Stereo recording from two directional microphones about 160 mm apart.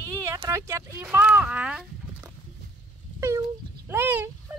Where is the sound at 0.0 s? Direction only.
20° right (ahead or behind).